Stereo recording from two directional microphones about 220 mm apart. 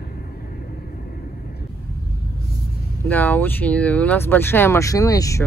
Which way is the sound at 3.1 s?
5° left (ahead or behind).